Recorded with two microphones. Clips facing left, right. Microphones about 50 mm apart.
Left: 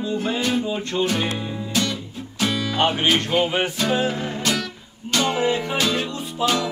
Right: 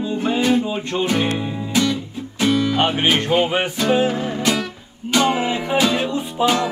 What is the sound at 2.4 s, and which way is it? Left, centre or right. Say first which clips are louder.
Music: right 4 dB; centre.